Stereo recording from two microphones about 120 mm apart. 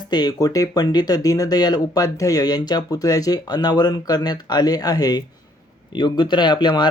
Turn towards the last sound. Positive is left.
turn(degrees=40)  # may be behind; listen again after turning